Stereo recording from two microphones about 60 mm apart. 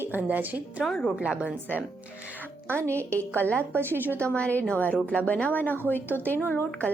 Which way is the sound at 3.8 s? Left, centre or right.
Right.